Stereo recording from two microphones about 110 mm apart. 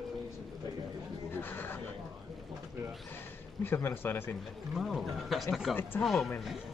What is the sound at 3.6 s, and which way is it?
Speech, 20° left (ahead or behind).